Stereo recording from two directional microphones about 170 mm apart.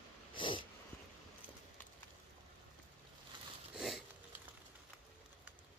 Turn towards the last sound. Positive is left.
turn(degrees=0)  # may be behind; listen again after turning